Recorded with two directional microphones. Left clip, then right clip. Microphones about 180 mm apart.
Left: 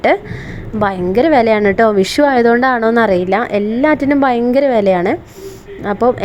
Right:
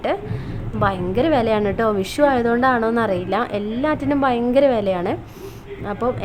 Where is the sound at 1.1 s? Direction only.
35° left (ahead or behind).